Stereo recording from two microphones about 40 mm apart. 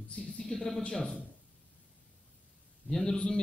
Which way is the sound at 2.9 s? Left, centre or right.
Centre.